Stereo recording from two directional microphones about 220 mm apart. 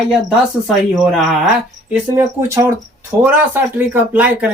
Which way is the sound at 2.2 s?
10° right (ahead or behind).